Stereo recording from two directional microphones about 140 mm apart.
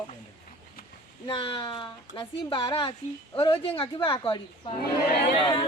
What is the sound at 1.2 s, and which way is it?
Speech, 35° left (ahead or behind).